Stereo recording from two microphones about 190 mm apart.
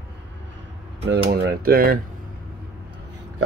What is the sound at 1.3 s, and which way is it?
Speech, 50° right (ahead or behind).